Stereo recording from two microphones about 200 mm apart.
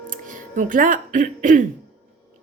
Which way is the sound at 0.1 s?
40° right (ahead or behind).